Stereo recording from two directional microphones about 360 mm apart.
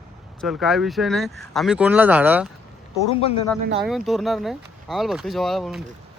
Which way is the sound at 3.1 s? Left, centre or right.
Centre.